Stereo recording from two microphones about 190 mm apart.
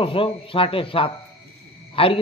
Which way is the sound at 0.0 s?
30° left (ahead or behind).